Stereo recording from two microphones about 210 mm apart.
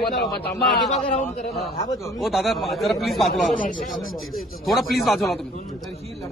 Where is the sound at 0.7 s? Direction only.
Centre (ahead or behind).